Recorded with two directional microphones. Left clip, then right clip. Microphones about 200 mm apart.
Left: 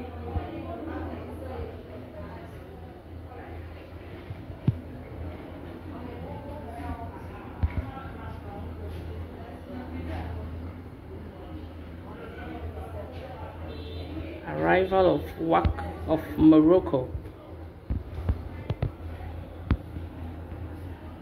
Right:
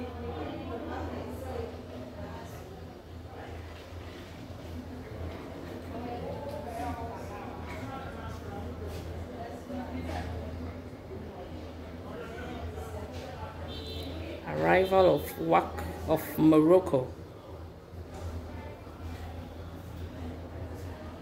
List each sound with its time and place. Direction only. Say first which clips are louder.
14.4 s speech: left 2 dB; 15° right (ahead or behind)